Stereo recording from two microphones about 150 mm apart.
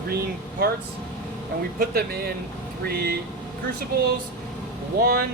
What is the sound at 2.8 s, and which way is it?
Speech, 90° right.